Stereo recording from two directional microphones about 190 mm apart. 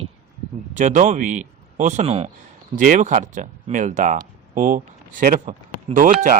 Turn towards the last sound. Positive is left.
turn(degrees=-45)  # may be behind; listen again after turning